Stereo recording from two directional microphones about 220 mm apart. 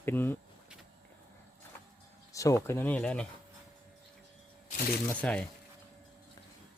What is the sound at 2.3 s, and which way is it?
Speech, 15° left (ahead or behind).